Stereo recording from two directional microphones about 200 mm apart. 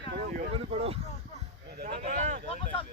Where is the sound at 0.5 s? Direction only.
30° right (ahead or behind).